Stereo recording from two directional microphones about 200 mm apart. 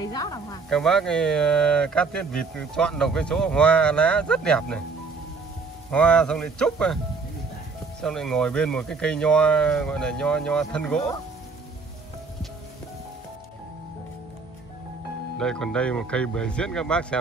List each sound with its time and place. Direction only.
0.1 s speech: 20° left (ahead or behind)
0.7 s speech: centre (ahead or behind)
5.9 s speech: 5° left (ahead or behind)
8.0 s speech: centre (ahead or behind)
15.3 s speech: 5° left (ahead or behind)